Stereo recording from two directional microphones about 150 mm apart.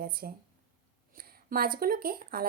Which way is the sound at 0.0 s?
80° right.